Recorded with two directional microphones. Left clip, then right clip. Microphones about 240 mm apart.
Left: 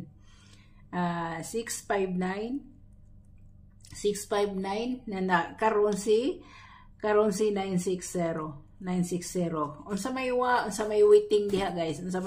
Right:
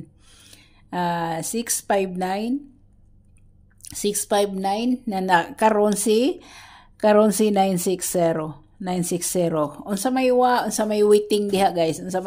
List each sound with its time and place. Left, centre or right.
0.3 s speech: right
3.8 s a woman's voice: right